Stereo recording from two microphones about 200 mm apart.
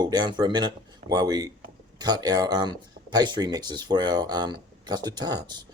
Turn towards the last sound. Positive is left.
turn(degrees=-20)  # may be behind; listen again after turning